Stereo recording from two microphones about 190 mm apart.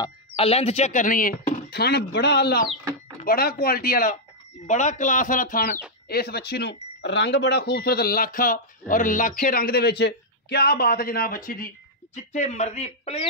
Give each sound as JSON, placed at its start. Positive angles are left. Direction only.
{"t": 0.0, "sound": "speech", "side_deg": 30}
{"t": 12.2, "sound": "speech", "side_deg": 35}